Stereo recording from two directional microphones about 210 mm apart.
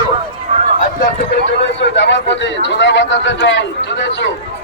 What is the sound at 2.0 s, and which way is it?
A man's voice, 55° left (ahead or behind).